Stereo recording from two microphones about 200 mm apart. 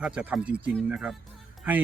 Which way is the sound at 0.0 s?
5° right (ahead or behind).